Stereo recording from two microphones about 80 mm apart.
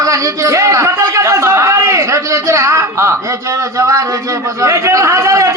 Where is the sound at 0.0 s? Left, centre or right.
Right.